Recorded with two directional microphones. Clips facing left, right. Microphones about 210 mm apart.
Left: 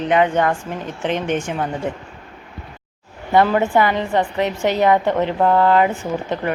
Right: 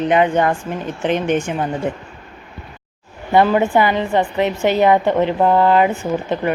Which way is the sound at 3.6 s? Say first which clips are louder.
Right 1 dB; 25° right (ahead or behind).